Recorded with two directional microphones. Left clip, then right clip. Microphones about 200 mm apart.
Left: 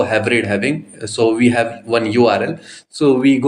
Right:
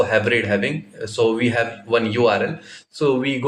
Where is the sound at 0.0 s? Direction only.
35° left (ahead or behind).